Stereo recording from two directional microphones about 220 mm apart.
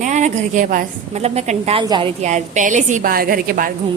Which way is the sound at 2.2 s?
30° right (ahead or behind).